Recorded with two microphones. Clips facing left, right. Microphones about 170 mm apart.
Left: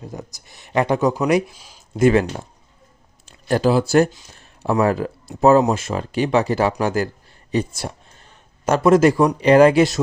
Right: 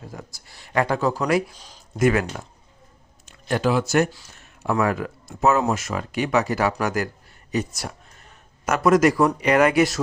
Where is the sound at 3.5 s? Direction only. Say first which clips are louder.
Left 4 dB; 35° left (ahead or behind).